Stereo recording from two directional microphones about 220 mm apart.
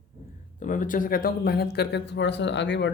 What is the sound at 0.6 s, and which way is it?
A man's voice, 35° left (ahead or behind).